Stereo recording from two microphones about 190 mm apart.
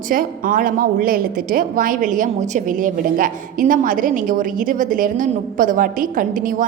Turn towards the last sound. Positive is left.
turn(degrees=-45)  # may be behind; listen again after turning